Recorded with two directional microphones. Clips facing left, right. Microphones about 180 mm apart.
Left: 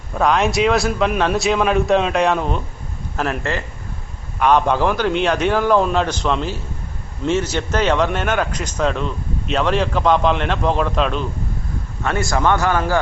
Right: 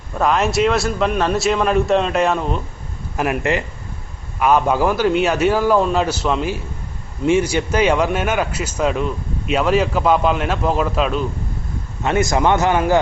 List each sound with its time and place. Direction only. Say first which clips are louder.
0.2 s a man's voice: even; centre (ahead or behind)
3.2 s a man's voice: right 3 dB; 15° right (ahead or behind)
12.0 s a man's voice: right 2 dB; 20° right (ahead or behind)